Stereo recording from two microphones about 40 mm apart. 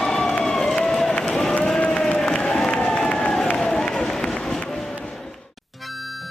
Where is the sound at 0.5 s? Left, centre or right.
Centre.